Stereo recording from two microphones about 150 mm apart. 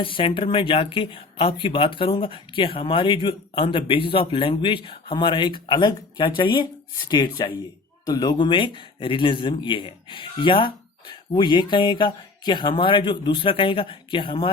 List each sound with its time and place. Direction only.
0.0 s speech: 35° left (ahead or behind)